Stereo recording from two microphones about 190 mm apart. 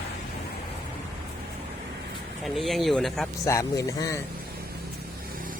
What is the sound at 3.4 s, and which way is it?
Speech, 15° left (ahead or behind).